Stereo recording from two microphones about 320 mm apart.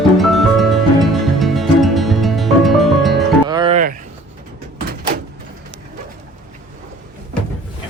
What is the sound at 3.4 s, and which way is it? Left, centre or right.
Music, centre.